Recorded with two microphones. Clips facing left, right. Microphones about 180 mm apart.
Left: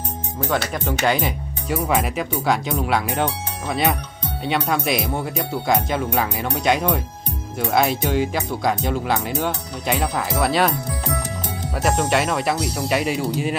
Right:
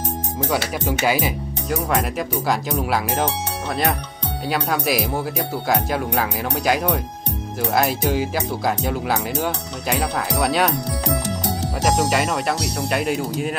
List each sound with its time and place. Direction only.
0.5 s speech: 5° right (ahead or behind)
4.5 s speech: centre (ahead or behind)
10.7 s music: 80° right
11.8 s speech: centre (ahead or behind)